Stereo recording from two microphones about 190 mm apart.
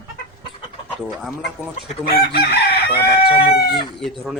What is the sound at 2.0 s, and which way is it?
Chicken, 50° left (ahead or behind).